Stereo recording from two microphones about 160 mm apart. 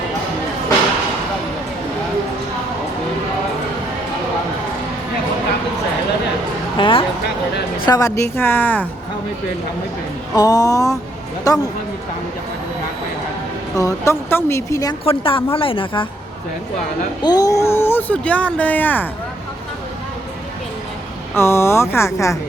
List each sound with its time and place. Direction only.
6.7 s a sound: 30° left (ahead or behind)
7.9 s speech: 20° left (ahead or behind)
10.3 s speech: 25° left (ahead or behind)
13.7 s speech: 20° left (ahead or behind)
15.2 s a woman's voice: 35° left (ahead or behind)
17.2 s speech: 25° left (ahead or behind)
21.3 s speech: 15° left (ahead or behind)